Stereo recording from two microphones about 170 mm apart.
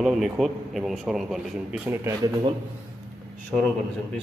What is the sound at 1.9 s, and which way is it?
Speech, 15° right (ahead or behind).